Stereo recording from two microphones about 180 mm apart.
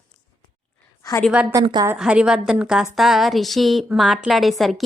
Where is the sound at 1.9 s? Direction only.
5° right (ahead or behind).